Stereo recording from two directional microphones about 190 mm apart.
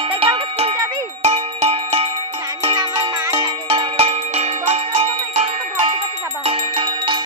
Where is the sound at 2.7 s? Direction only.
20° right (ahead or behind).